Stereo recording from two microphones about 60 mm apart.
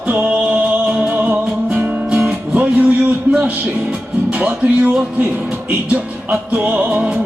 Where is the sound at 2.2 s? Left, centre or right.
Right.